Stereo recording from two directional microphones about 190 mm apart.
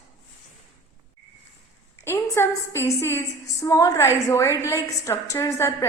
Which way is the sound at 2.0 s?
15° left (ahead or behind).